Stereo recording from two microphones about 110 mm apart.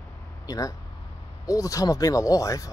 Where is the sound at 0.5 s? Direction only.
30° left (ahead or behind).